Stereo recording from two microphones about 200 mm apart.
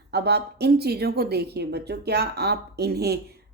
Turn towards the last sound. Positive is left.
turn(degrees=-55)  # may be behind; listen again after turning